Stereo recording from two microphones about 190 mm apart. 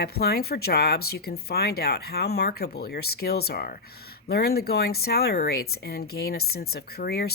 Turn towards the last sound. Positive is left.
turn(degrees=55)  # may be behind; listen again after turning